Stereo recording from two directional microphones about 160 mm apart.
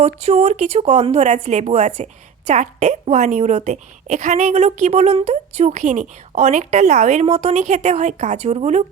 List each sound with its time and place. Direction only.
0.0 s a woman's voice: 40° right (ahead or behind)